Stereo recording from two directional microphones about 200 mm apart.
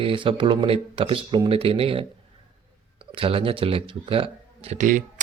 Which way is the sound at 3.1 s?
25° right (ahead or behind).